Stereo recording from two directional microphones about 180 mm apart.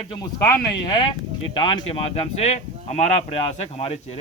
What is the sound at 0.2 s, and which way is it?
Speech, 20° left (ahead or behind).